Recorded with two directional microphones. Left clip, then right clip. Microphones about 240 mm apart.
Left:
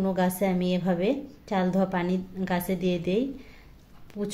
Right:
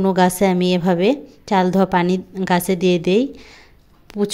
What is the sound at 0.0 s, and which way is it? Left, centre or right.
A woman's voice, right.